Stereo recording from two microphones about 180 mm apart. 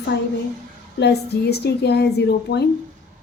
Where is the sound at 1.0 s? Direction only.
65° left (ahead or behind).